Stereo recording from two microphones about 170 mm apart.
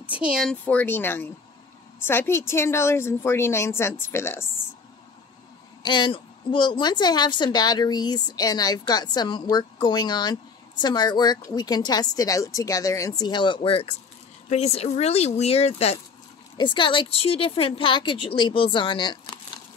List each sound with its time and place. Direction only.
0.0 s a woman's voice: 5° right (ahead or behind); by 4.5 s 15° left (ahead or behind)
5.8 s a woman's voice: 25° left (ahead or behind)